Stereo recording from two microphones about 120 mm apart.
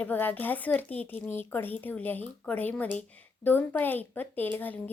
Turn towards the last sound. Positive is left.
turn(degrees=15)  # may be behind; listen again after turning